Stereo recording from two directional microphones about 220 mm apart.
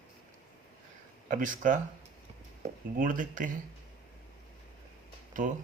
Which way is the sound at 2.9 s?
40° right (ahead or behind).